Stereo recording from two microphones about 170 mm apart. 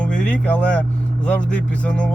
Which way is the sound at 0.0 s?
10° left (ahead or behind).